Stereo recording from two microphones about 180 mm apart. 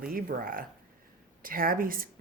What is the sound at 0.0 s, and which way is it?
Speech, 55° right (ahead or behind).